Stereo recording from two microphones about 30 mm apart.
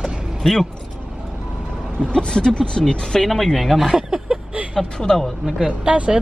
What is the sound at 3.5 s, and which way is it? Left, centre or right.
Speech, centre.